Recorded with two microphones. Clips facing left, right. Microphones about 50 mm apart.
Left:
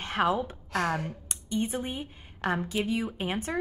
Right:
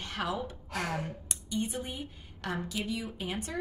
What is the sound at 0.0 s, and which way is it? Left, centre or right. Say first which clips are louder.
Gasp: left 8 dB; left.